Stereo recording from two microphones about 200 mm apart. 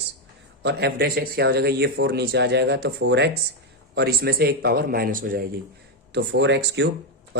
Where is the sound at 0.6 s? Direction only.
55° right (ahead or behind).